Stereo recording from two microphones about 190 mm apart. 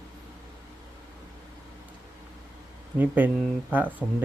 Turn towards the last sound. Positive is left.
turn(degrees=-10)  # may be behind; listen again after turning